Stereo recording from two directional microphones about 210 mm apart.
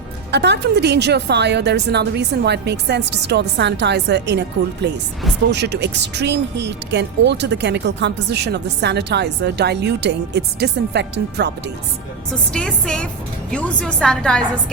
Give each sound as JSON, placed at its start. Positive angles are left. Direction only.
{"t": 0.3, "sound": "speech", "side_deg": -55}
{"t": 12.5, "sound": "a woman's voice", "side_deg": 5}